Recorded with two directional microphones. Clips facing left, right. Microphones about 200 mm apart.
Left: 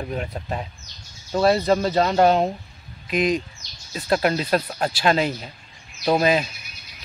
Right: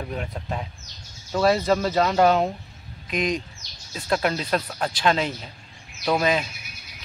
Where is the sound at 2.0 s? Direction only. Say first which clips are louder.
Left 1 dB; 35° left (ahead or behind).